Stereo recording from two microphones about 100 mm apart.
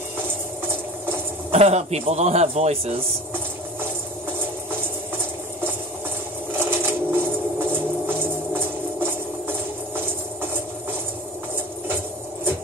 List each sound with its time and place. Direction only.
1.5 s speech: 90° right
6.6 s music: 25° right (ahead or behind)